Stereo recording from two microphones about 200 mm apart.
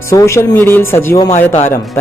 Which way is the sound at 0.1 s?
15° left (ahead or behind).